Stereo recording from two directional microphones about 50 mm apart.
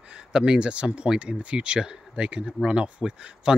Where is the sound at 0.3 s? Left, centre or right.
Centre.